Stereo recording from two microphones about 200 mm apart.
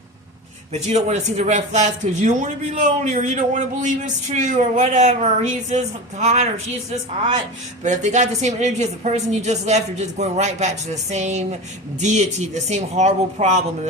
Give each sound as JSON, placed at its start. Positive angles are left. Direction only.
{"t": 0.7, "sound": "speech", "side_deg": -35}
{"t": 7.9, "sound": "speech", "side_deg": -35}